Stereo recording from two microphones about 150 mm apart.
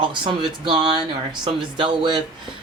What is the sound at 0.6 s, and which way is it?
Speech, 30° right (ahead or behind).